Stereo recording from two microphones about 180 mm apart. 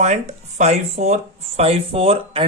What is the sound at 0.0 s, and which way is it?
Speech, 40° right (ahead or behind).